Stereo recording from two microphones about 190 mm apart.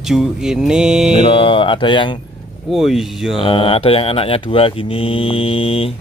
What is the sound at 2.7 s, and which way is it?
Speech, centre (ahead or behind).